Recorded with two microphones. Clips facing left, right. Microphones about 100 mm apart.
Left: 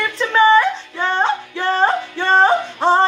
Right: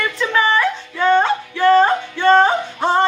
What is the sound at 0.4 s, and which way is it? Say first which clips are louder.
Music: left 5 dB; 30° left (ahead or behind).